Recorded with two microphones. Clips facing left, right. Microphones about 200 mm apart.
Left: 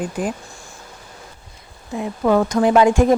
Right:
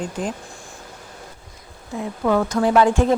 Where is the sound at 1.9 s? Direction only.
25° left (ahead or behind).